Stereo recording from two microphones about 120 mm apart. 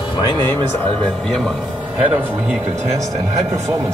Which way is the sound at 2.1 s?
10° right (ahead or behind).